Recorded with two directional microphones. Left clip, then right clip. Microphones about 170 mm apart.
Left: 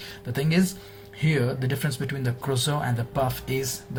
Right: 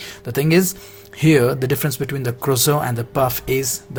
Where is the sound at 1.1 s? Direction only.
65° right (ahead or behind).